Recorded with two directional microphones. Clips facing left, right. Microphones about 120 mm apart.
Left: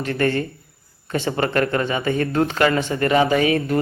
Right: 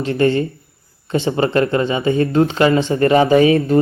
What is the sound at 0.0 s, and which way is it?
Speech, 20° right (ahead or behind).